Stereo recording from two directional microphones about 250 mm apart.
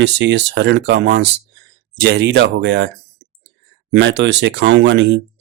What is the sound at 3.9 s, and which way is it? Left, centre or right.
Speech, right.